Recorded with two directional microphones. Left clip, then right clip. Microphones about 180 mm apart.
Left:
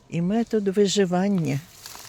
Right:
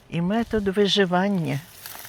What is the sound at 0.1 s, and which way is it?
Speech, 30° left (ahead or behind).